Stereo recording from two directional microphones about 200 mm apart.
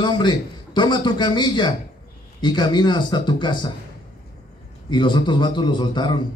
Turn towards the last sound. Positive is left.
turn(degrees=20)  # may be behind; listen again after turning